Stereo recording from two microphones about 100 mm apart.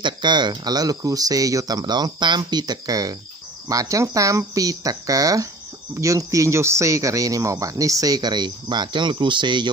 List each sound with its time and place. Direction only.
0.0 s speech: 50° right (ahead or behind)